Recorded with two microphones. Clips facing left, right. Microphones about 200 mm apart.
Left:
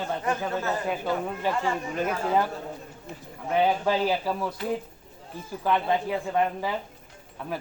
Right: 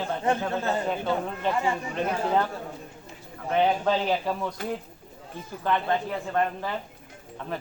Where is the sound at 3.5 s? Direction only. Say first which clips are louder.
Even; 5° left (ahead or behind).